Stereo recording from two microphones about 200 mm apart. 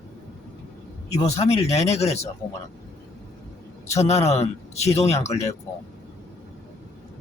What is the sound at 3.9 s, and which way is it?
Speech, 35° left (ahead or behind).